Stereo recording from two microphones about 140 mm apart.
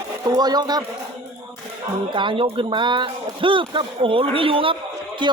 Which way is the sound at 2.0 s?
35° right (ahead or behind).